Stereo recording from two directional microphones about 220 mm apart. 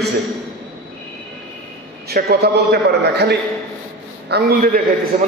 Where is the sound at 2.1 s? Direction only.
45° right (ahead or behind).